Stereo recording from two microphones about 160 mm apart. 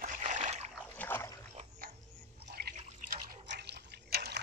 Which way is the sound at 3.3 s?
90° right.